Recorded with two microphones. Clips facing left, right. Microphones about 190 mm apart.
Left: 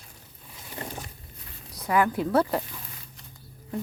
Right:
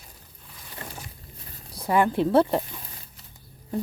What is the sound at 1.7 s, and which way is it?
Speech, 30° right (ahead or behind).